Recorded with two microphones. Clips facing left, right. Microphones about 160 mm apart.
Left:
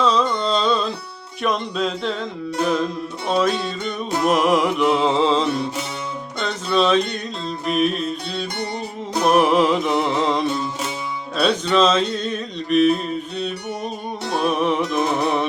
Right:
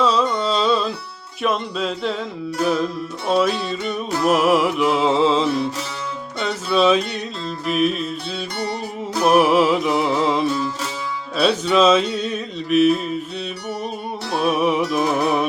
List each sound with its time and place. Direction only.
0.0 s carnatic music: 5° right (ahead or behind)
1.4 s music: 5° right (ahead or behind)
8.6 s music: 20° left (ahead or behind)
9.2 s music: 5° right (ahead or behind)